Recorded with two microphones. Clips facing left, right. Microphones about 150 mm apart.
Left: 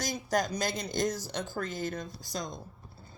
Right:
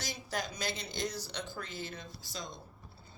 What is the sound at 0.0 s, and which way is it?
Speech, 45° left (ahead or behind).